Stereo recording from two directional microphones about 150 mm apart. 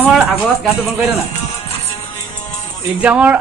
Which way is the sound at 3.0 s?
10° right (ahead or behind).